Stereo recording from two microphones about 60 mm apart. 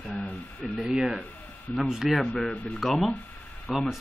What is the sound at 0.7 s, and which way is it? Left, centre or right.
Speech, centre.